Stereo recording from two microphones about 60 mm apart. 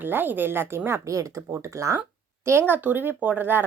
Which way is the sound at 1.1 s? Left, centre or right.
Right.